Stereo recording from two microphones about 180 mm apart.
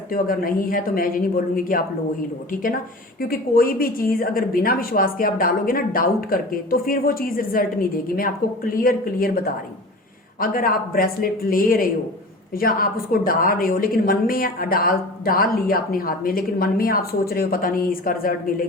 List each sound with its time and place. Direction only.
0.1 s a woman's voice: 50° left (ahead or behind)
3.2 s a woman's voice: 55° left (ahead or behind)